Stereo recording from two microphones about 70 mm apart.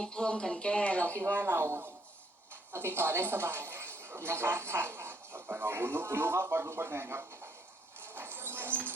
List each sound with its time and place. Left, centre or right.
0.0 s speech: centre
1.2 s speech: right
8.0 s a sound: right